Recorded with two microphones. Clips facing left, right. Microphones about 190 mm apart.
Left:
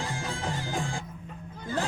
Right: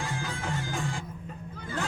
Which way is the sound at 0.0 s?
30° left (ahead or behind).